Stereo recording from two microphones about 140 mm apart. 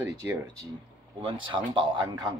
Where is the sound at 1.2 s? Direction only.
35° right (ahead or behind).